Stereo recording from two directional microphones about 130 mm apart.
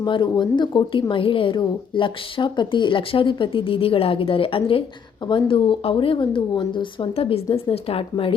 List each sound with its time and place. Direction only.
0.0 s a woman's voice: 35° left (ahead or behind)